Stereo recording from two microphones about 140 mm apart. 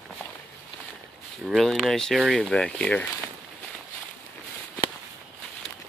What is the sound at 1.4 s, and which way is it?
Speech, centre (ahead or behind).